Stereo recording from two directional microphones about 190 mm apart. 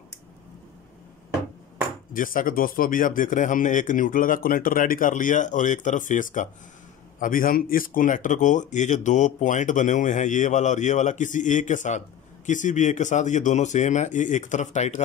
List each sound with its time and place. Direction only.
2.1 s speech: 45° left (ahead or behind)